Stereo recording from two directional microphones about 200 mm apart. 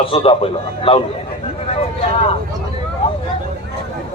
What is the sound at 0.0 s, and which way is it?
A man's voice, 25° left (ahead or behind).